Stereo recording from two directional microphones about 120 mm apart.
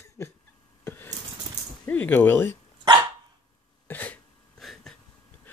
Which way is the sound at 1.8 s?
15° left (ahead or behind).